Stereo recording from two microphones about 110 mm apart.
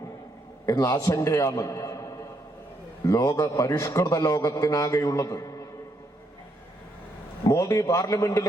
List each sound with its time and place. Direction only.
0.6 s a man's voice: 30° left (ahead or behind)
7.4 s a man's voice: 30° left (ahead or behind)